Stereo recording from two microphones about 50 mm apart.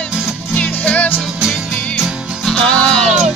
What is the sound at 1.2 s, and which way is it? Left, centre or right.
Music, centre.